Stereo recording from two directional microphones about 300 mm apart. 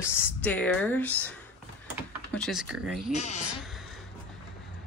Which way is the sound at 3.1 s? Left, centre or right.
Left.